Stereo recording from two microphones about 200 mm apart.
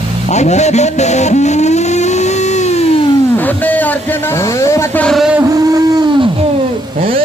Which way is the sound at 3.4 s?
10° left (ahead or behind).